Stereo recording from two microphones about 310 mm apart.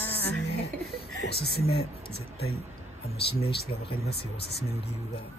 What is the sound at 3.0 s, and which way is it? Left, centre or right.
Speech, centre.